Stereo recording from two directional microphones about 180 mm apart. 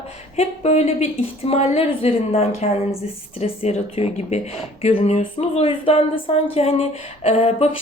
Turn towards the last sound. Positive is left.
turn(degrees=35)  # may be behind; listen again after turning